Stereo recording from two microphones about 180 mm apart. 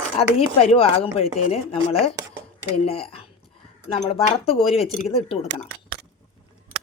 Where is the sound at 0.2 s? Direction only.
35° left (ahead or behind).